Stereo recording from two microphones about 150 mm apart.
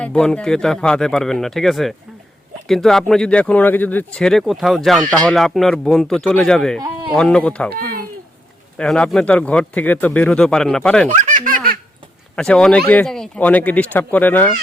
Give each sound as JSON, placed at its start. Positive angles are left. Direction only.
{"t": 0.0, "sound": "speech", "side_deg": 5}
{"t": 8.8, "sound": "speech", "side_deg": 5}
{"t": 11.1, "sound": "baby laughter", "side_deg": -55}
{"t": 12.4, "sound": "speech", "side_deg": 5}